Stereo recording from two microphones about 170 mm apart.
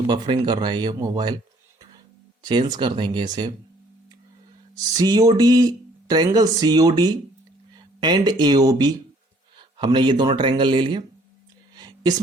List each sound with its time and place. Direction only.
0.1 s speech: 25° right (ahead or behind)
2.4 s speech: 25° right (ahead or behind)
4.9 s speech: 25° right (ahead or behind)